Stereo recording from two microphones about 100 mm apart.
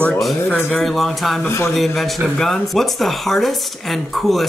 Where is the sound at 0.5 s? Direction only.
15° left (ahead or behind).